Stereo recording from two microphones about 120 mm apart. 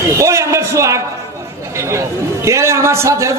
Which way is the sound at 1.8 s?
25° right (ahead or behind).